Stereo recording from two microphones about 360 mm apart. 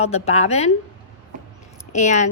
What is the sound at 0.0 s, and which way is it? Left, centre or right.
Speech, centre.